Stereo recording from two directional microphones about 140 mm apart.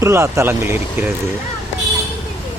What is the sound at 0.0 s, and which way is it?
Speech, 20° right (ahead or behind).